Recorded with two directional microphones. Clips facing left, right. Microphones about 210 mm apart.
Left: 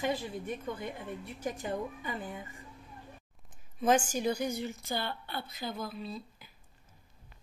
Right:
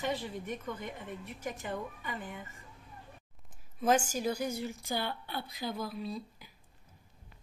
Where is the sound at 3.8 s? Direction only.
Centre (ahead or behind).